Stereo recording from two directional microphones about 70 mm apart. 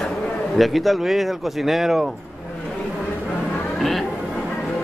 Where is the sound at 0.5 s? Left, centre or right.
Centre.